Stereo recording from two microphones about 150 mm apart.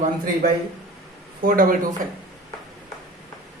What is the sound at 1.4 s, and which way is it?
Speech, 70° right (ahead or behind).